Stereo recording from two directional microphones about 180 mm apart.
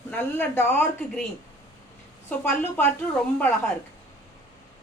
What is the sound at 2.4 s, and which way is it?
Speech, 10° left (ahead or behind).